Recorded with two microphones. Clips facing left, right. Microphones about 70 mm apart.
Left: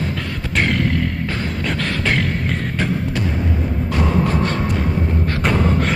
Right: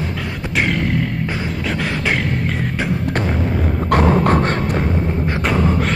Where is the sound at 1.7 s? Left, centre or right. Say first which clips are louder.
Right 1 dB; centre.